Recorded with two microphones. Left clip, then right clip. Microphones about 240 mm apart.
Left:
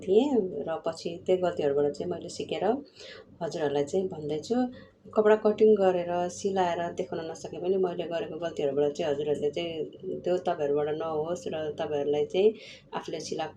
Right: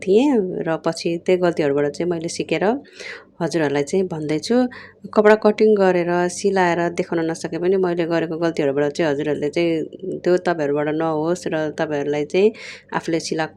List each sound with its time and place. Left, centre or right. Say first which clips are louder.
0.2 s speech: right 7 dB; right